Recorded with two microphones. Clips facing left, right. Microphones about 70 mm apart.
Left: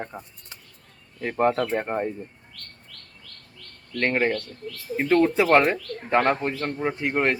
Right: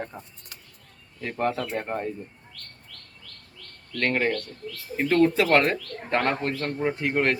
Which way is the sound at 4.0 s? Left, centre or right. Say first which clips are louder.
Left 2 dB; centre.